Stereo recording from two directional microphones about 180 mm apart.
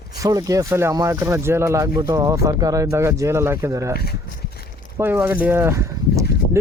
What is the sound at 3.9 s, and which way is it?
Speech, 60° left (ahead or behind).